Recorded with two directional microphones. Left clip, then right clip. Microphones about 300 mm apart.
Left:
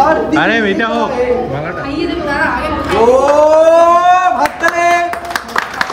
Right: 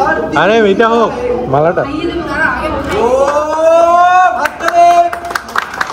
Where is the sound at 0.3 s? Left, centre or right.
Centre.